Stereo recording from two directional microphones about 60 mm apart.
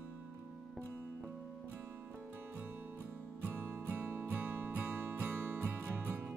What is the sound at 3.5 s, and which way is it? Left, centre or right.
Music, right.